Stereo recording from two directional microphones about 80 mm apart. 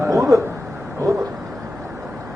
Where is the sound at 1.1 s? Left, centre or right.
Right.